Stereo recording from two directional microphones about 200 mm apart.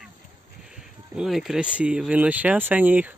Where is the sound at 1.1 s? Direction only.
Centre (ahead or behind).